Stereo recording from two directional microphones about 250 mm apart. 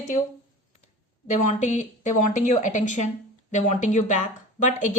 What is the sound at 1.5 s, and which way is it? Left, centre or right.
A woman's voice, left.